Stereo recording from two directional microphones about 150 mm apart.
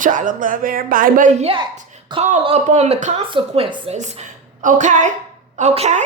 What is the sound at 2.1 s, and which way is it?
Speech, 30° right (ahead or behind).